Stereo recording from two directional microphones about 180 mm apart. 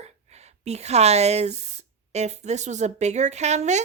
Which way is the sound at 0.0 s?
40° right (ahead or behind).